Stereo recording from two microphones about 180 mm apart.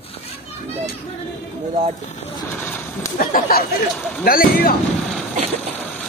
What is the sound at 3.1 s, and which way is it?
Speech, 50° left (ahead or behind).